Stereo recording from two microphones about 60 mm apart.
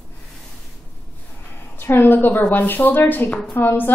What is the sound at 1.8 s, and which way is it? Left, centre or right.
A woman's voice, left.